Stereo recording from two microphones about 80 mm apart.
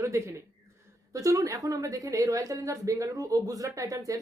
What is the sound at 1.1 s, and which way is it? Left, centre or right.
Speech, right.